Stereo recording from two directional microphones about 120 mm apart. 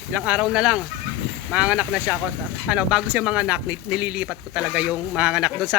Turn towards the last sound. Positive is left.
turn(degrees=-5)  # may be behind; listen again after turning